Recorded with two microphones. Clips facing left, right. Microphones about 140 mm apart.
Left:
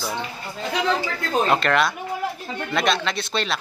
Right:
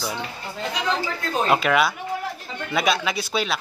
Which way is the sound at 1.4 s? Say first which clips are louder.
Right 2 dB; 5° right (ahead or behind).